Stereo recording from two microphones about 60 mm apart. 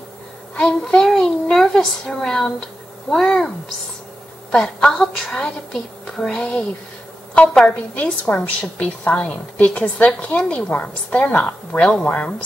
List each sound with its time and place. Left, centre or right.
0.6 s a child's voice: centre
7.9 s a woman's voice: left